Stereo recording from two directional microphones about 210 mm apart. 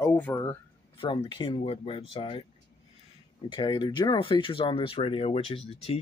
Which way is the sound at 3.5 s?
20° left (ahead or behind).